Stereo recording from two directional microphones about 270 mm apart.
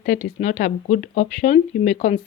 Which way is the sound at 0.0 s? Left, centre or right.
Left.